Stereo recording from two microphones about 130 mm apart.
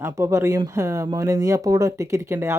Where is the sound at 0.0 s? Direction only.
20° right (ahead or behind).